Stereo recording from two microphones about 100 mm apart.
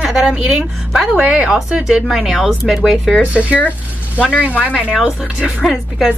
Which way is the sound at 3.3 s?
15° right (ahead or behind).